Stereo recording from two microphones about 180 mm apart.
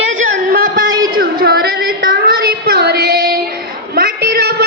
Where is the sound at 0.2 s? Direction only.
50° right (ahead or behind).